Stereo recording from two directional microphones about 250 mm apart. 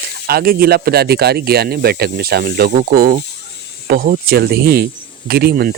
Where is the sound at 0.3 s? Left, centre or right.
Right.